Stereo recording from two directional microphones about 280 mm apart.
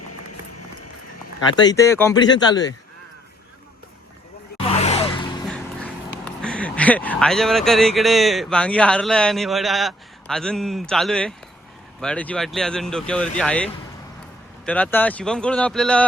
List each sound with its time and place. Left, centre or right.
0.0 s a sound: left
1.5 s speech: centre
4.5 s gasp: left
5.5 s speech: centre